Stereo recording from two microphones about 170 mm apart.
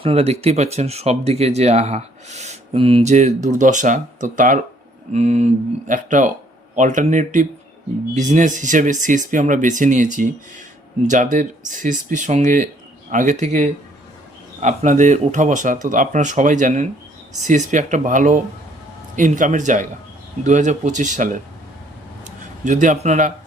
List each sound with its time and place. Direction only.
0.0 s speech: 35° right (ahead or behind)
11.1 s speech: 45° right (ahead or behind)